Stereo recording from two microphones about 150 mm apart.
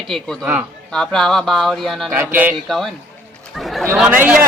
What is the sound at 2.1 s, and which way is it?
Speech, 10° right (ahead or behind).